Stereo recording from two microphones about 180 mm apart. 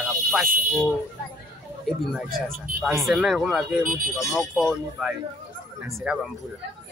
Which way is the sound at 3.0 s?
Centre (ahead or behind).